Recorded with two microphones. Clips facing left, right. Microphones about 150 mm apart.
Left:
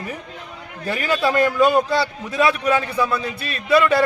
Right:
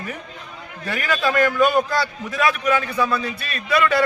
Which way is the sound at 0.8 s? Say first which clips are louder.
Left 2 dB; 30° left (ahead or behind).